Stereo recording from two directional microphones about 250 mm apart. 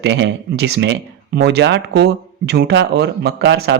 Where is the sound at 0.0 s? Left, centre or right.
Right.